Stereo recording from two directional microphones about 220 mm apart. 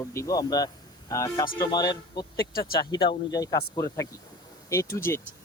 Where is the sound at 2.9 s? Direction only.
20° left (ahead or behind).